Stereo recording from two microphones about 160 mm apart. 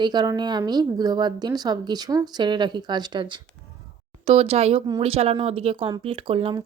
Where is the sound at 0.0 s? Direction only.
25° right (ahead or behind).